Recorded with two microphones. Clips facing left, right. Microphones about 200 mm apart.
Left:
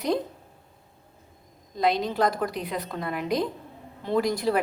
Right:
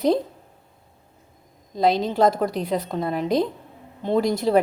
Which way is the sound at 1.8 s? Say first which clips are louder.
Right 5 dB; 30° right (ahead or behind).